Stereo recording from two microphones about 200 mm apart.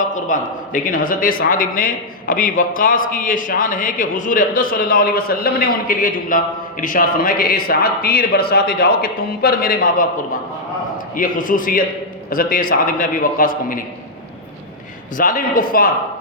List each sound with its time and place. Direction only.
0.1 s a man's voice: 40° left (ahead or behind)
15.2 s a man's voice: 45° left (ahead or behind)